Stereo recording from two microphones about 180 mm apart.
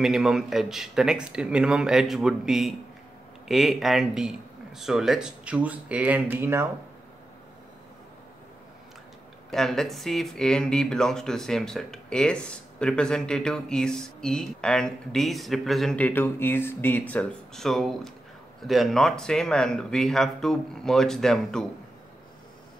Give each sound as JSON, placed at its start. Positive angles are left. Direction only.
{"t": 0.0, "sound": "speech", "side_deg": 0}
{"t": 9.5, "sound": "speech", "side_deg": 0}